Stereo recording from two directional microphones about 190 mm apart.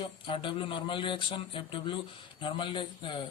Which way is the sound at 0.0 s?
25° left (ahead or behind).